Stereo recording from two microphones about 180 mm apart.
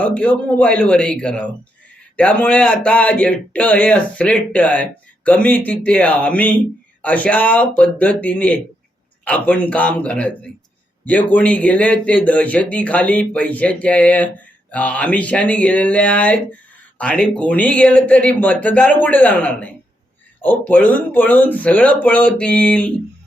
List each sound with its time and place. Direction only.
0.0 s speech: 5° left (ahead or behind)